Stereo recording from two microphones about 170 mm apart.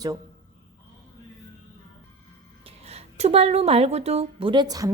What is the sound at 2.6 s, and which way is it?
A woman's voice, 35° right (ahead or behind).